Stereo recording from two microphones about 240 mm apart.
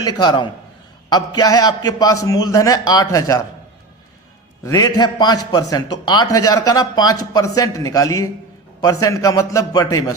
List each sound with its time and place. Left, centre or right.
0.2 s a man's voice: centre
4.6 s a man's voice: centre